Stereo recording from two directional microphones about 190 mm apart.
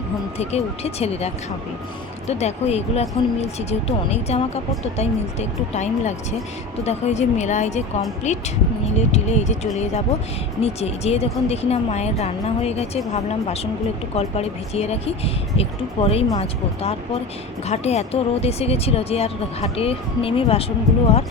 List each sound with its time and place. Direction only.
0.3 s speech: 35° left (ahead or behind)
14.2 s speech: 35° left (ahead or behind)
17.7 s speech: 35° left (ahead or behind)